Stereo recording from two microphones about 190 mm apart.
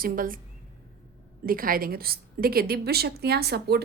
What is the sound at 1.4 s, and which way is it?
A woman's voice, 50° right (ahead or behind).